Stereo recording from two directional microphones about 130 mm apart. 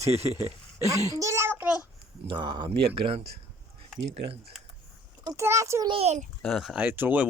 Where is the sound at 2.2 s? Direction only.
35° right (ahead or behind).